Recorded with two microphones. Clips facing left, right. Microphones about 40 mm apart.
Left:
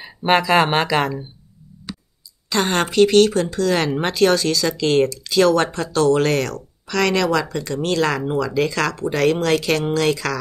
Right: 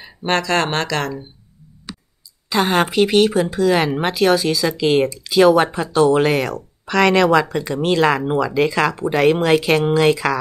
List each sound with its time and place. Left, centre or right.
0.0 s speech: centre
1.9 s clicking: centre
2.5 s speech: centre